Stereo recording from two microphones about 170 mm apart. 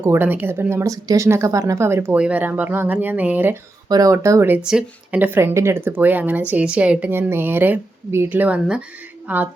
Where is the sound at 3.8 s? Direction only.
20° right (ahead or behind).